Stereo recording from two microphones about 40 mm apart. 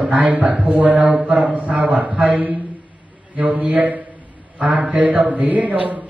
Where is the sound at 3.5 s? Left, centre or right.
Right.